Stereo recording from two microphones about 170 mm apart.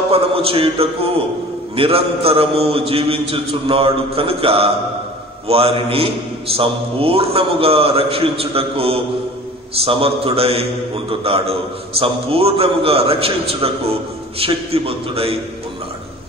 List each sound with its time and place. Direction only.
0.1 s a man's voice: 35° right (ahead or behind)